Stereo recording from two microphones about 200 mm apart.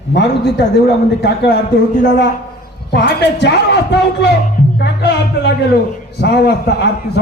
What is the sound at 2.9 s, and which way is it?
A man's voice, 60° left (ahead or behind).